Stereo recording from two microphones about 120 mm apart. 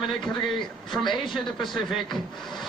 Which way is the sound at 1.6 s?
40° left (ahead or behind).